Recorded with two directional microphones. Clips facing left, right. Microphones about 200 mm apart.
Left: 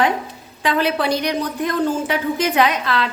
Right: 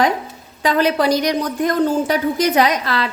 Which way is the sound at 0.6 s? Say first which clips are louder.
Right 3 dB; 40° right (ahead or behind).